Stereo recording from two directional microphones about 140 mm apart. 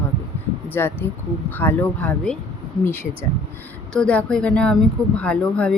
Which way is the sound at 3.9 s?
5° left (ahead or behind).